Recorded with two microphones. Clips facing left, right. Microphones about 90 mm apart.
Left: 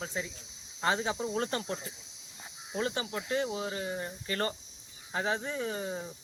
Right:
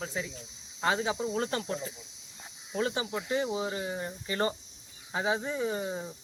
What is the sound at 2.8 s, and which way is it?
Speech, 15° right (ahead or behind).